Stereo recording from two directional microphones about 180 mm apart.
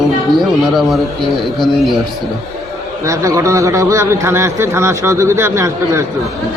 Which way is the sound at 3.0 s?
15° right (ahead or behind).